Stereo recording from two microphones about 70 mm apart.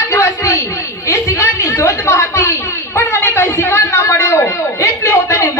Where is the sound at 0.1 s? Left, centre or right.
Left.